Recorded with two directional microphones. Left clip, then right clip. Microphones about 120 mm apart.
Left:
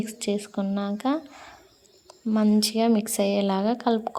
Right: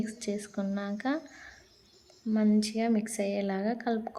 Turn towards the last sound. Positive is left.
turn(degrees=30)  # may be behind; listen again after turning